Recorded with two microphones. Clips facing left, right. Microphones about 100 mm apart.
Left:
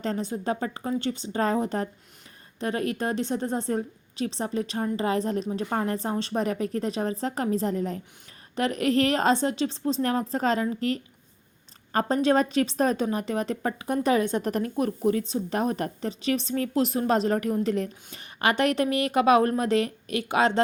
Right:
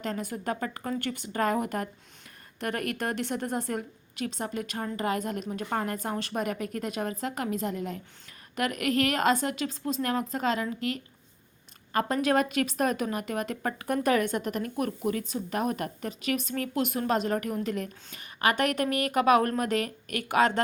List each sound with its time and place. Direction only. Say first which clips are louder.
0.0 s a woman's voice: left 4 dB; 25° left (ahead or behind)